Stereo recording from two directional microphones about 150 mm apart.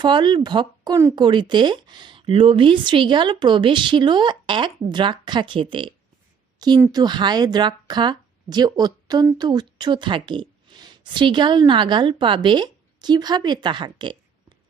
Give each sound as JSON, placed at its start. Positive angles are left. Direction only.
{"t": 0.0, "sound": "speech", "side_deg": -30}